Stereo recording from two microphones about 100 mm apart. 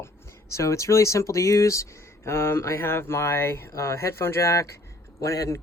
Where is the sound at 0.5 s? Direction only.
30° left (ahead or behind).